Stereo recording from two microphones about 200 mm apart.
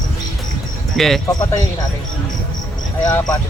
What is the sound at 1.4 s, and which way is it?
Speech, 15° left (ahead or behind).